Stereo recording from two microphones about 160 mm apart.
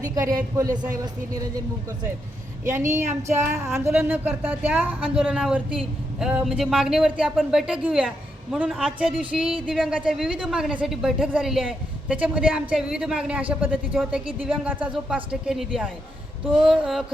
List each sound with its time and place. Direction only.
0.0 s speech: 25° right (ahead or behind)
3.1 s child singing: 45° right (ahead or behind)
3.5 s a woman's voice: 20° right (ahead or behind); by 17.1 s 5° right (ahead or behind)